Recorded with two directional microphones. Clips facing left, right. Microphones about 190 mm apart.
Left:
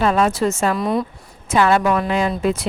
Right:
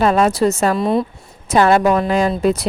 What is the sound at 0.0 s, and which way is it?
A woman's voice, 40° right (ahead or behind).